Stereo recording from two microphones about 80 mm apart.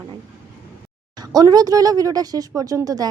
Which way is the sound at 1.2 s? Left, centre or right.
Right.